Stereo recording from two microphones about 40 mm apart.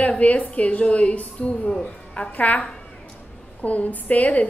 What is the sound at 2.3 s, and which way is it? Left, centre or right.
A woman's voice, left.